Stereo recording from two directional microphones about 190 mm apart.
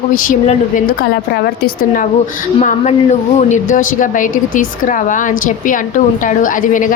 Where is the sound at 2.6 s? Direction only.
35° left (ahead or behind).